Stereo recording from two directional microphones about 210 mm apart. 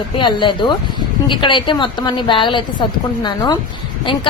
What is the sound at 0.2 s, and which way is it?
A woman's voice, 25° left (ahead or behind).